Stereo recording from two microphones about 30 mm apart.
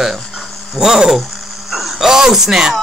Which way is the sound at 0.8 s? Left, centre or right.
Centre.